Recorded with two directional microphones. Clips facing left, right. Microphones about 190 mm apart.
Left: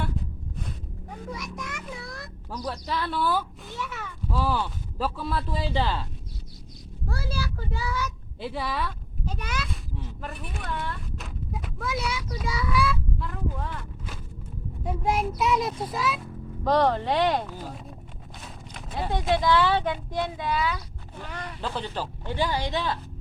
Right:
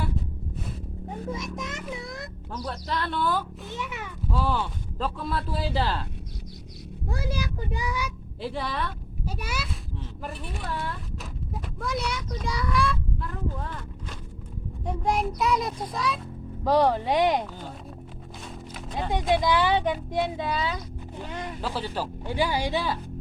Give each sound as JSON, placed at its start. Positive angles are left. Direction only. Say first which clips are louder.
{"t": 1.0, "sound": "a child's voice", "louder": "right 4 dB", "side_deg": -25}
{"t": 2.5, "sound": "speech", "louder": "left 1 dB", "side_deg": 0}
{"t": 3.7, "sound": "speech", "louder": "right 1 dB", "side_deg": -15}
{"t": 4.3, "sound": "speech", "louder": "even", "side_deg": 0}
{"t": 7.1, "sound": "speech", "louder": "right 2 dB", "side_deg": -20}
{"t": 8.4, "sound": "speech", "louder": "even", "side_deg": 0}
{"t": 9.2, "sound": "speech", "louder": "even", "side_deg": -10}
{"t": 14.8, "sound": "speech", "louder": "even", "side_deg": 0}
{"t": 16.6, "sound": "speech", "louder": "right 1 dB", "side_deg": -10}
{"t": 17.4, "sound": "speech", "louder": "left 1 dB", "side_deg": 5}
{"t": 18.7, "sound": "a sound", "louder": "even", "side_deg": 5}
{"t": 19.3, "sound": "speech", "louder": "even", "side_deg": -15}
{"t": 21.6, "sound": "speech", "louder": "even", "side_deg": -5}